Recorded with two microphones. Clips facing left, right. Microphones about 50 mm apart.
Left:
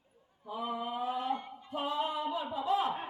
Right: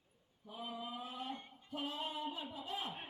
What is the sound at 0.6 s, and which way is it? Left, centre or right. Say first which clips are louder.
Speech: left 10 dB; left.